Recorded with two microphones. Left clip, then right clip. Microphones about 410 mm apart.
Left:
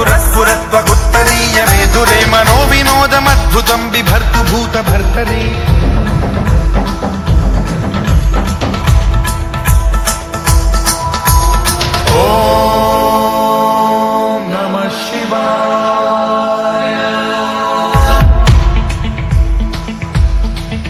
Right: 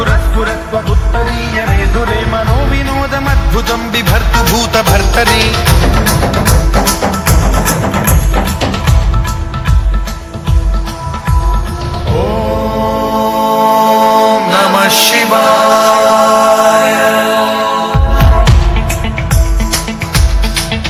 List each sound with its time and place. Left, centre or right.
0.0 s music: centre
1.1 s music: left; by 5.5 s centre
6.1 s music: right
7.6 s music: right
12.0 s music: left; by 16.5 s right
16.6 s music: right; by 17.9 s centre